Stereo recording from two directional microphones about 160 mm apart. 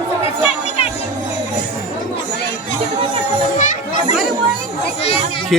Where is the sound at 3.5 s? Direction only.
50° left (ahead or behind).